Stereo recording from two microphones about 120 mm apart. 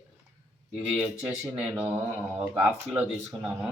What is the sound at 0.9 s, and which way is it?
Speech, 10° right (ahead or behind).